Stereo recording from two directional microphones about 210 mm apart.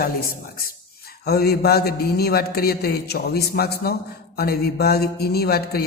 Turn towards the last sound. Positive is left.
turn(degrees=45)  # may be behind; listen again after turning